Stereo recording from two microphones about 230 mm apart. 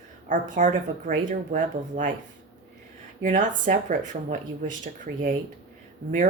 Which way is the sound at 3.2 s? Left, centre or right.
Right.